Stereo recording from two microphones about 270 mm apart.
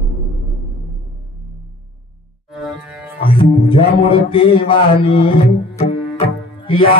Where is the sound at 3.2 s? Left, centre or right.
Centre.